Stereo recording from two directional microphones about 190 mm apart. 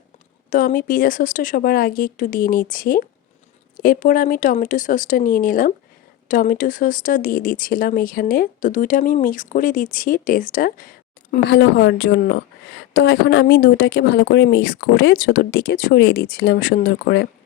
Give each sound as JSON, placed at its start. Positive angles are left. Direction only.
{"t": 0.5, "sound": "speech", "side_deg": 45}